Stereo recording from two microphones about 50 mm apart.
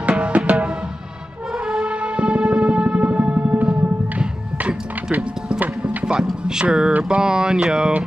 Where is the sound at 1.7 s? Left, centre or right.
Right.